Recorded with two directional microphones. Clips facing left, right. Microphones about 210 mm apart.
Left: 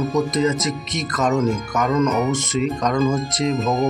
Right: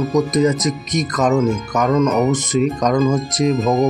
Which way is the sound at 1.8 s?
Centre (ahead or behind).